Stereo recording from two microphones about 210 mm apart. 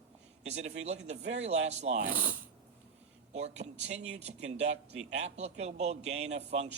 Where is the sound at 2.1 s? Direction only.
25° left (ahead or behind).